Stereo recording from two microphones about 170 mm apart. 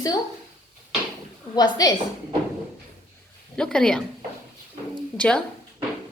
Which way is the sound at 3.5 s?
5° left (ahead or behind).